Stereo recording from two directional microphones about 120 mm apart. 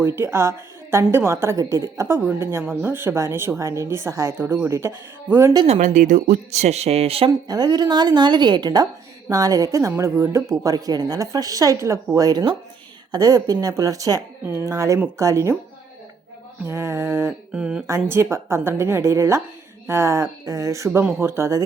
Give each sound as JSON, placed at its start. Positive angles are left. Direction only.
{"t": 0.0, "sound": "a woman's voice", "side_deg": -20}
{"t": 5.6, "sound": "speech", "side_deg": -75}
{"t": 7.3, "sound": "a woman's voice", "side_deg": -30}
{"t": 16.6, "sound": "a woman's voice", "side_deg": -25}
{"t": 17.5, "sound": "speech", "side_deg": -5}
{"t": 17.8, "sound": "a woman's voice", "side_deg": -25}